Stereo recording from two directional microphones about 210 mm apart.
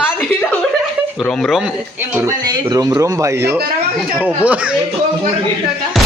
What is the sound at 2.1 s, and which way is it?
Speech, 10° right (ahead or behind).